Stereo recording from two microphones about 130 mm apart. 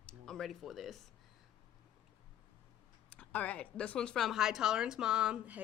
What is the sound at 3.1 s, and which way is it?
A woman's voice, 10° left (ahead or behind).